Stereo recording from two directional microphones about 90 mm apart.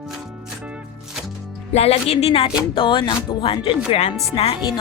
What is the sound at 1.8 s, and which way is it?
Speech, 90° left.